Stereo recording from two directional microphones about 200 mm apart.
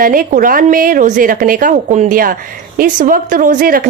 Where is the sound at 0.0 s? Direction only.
45° right (ahead or behind).